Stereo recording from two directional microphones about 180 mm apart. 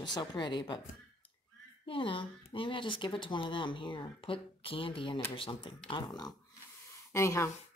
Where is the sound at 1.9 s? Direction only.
30° left (ahead or behind).